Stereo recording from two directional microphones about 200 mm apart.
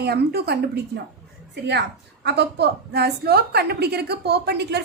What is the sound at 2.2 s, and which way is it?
A woman's voice, 55° right (ahead or behind).